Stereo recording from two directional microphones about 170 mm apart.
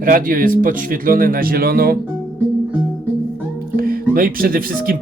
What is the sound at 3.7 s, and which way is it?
Speech, 60° right (ahead or behind).